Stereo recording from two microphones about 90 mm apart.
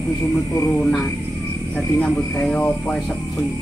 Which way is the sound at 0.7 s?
15° left (ahead or behind).